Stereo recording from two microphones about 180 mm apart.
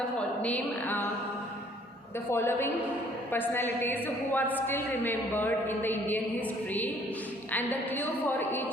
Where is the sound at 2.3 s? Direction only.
15° left (ahead or behind).